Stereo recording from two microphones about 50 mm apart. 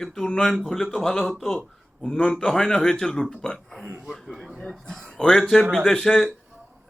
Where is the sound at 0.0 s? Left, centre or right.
Centre.